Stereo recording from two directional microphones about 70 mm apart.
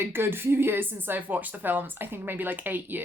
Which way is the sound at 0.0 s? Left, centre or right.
Right.